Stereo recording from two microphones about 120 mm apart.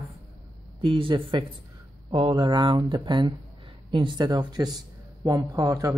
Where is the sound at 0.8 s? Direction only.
45° right (ahead or behind).